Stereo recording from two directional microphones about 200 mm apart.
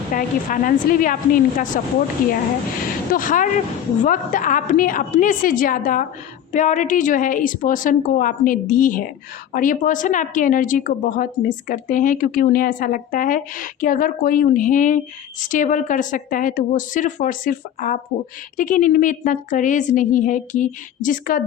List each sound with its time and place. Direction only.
0.1 s a woman's voice: 40° left (ahead or behind)